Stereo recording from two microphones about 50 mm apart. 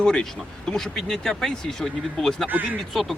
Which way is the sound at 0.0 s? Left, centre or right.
Centre.